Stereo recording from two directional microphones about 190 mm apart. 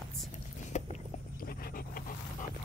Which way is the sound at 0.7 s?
40° left (ahead or behind).